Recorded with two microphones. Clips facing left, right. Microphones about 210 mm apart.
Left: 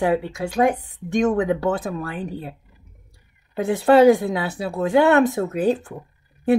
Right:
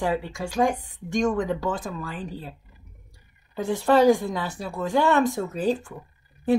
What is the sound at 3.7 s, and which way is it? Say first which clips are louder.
A woman's voice: left 5 dB; 60° left (ahead or behind).